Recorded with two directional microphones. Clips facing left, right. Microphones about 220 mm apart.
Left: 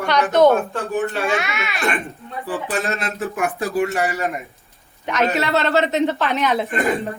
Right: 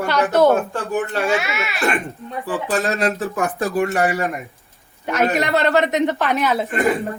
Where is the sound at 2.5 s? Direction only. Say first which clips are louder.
Right 2 dB; 40° right (ahead or behind).